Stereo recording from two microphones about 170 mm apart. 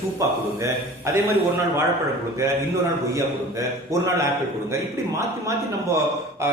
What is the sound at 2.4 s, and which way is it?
A man's voice, 15° right (ahead or behind).